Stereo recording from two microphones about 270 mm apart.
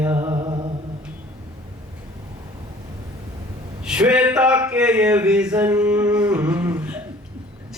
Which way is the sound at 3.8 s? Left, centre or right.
Centre.